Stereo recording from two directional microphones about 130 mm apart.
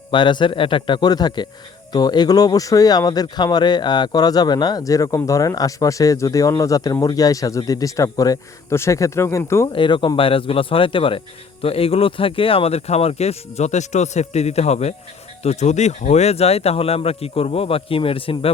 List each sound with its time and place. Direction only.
0.1 s a man's voice: 40° left (ahead or behind); by 9.6 s 20° left (ahead or behind)
9.7 s speech: 40° left (ahead or behind)